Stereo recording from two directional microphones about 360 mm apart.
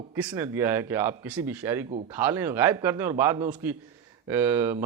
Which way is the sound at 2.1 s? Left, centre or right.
Centre.